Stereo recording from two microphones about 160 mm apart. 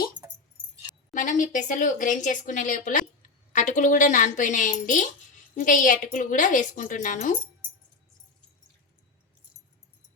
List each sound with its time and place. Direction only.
0.9 s a woman's voice: 55° left (ahead or behind)